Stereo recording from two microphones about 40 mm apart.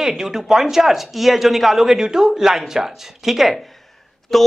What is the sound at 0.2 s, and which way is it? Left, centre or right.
Speech, centre.